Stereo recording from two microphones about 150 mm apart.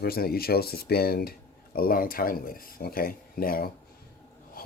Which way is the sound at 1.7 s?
75° left (ahead or behind).